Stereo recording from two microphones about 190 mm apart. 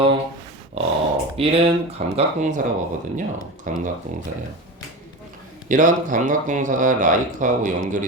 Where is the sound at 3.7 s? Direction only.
45° right (ahead or behind).